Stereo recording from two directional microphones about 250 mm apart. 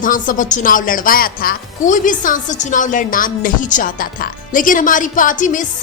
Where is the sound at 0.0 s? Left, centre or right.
Left.